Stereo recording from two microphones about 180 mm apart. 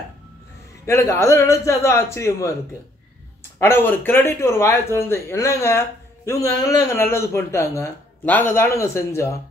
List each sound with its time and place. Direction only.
0.8 s speech: 15° left (ahead or behind)
3.5 s speech: 10° left (ahead or behind)